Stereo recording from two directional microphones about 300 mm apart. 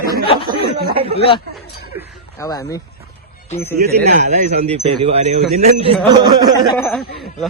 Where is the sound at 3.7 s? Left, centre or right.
Right; by 6.7 s centre.